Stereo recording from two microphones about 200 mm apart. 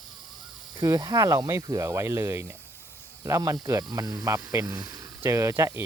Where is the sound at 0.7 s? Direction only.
20° right (ahead or behind).